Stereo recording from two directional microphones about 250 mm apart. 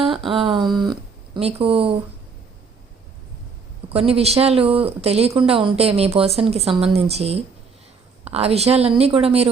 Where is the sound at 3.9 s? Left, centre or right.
Right.